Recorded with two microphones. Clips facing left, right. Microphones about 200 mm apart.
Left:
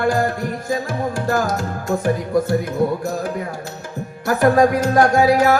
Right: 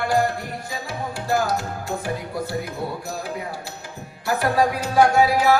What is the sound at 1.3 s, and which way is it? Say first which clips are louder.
Music: even; 45° left (ahead or behind).